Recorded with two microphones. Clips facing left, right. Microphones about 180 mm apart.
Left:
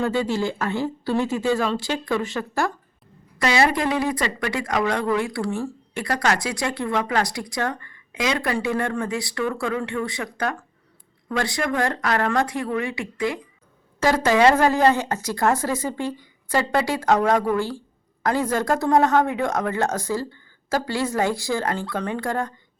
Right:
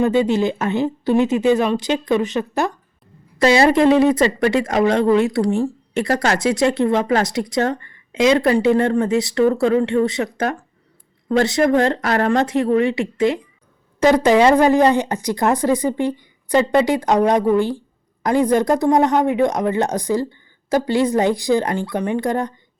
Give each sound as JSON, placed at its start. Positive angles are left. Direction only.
{"t": 0.0, "sound": "speech", "side_deg": -20}
{"t": 3.3, "sound": "speech", "side_deg": -30}